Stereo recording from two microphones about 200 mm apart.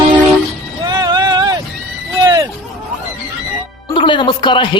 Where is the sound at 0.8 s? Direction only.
20° right (ahead or behind).